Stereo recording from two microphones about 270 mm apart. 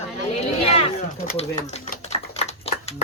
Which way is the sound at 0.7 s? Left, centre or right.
Left.